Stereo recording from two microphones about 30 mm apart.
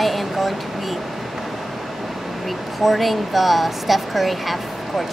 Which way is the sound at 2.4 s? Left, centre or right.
Centre.